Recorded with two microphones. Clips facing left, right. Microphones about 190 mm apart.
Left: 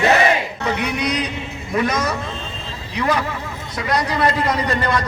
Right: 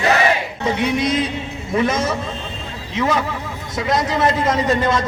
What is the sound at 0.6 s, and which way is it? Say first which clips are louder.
A man's voice: right 3 dB; 25° right (ahead or behind).